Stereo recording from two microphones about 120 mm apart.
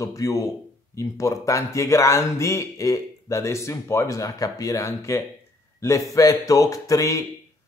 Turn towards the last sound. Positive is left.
turn(degrees=30)  # may be behind; listen again after turning